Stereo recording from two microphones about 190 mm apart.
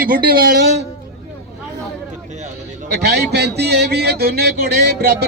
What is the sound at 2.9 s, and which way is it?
Speech, 60° right (ahead or behind).